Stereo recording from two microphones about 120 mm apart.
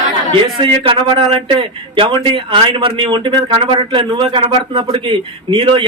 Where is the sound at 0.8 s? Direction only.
45° right (ahead or behind).